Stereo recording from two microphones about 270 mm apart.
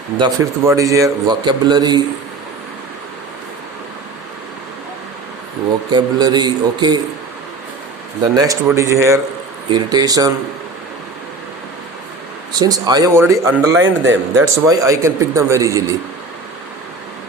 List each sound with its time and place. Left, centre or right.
0.2 s a man's voice: centre
5.9 s a man's voice: centre
8.4 s a man's voice: centre
12.5 s a man's voice: centre
13.7 s a man's voice: right
14.1 s a man's voice: centre